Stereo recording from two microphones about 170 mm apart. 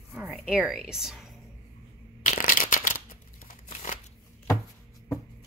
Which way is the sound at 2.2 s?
50° left (ahead or behind).